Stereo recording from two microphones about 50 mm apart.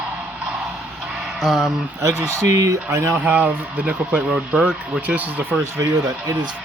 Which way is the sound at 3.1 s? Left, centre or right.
Right.